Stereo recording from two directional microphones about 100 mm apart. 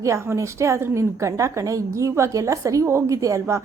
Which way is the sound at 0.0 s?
30° right (ahead or behind).